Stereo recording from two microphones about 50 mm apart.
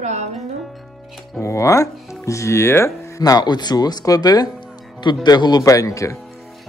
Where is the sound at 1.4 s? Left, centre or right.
Left.